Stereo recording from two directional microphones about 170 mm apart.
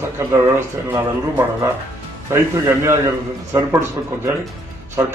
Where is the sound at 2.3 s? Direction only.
15° right (ahead or behind).